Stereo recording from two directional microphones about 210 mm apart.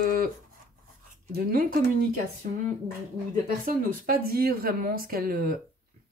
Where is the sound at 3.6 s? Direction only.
45° right (ahead or behind).